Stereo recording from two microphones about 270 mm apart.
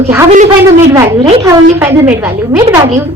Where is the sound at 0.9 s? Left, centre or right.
Centre.